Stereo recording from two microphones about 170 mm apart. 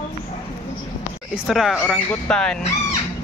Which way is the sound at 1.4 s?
Centre (ahead or behind).